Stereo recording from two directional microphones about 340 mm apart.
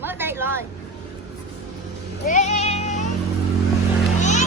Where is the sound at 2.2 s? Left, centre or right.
Left.